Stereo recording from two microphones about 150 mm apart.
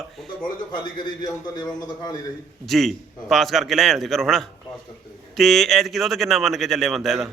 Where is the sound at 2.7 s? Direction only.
Centre (ahead or behind).